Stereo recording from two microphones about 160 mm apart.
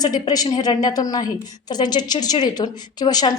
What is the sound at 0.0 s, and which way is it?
A woman's voice, 25° left (ahead or behind).